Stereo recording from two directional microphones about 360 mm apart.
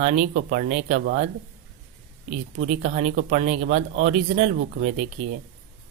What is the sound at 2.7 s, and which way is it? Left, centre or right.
Speech, centre.